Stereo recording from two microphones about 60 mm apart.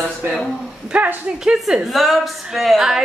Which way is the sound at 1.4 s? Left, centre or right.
Centre.